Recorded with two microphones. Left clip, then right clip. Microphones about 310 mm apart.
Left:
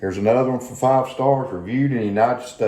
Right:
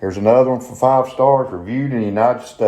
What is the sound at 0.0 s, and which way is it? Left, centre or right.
Speech, right.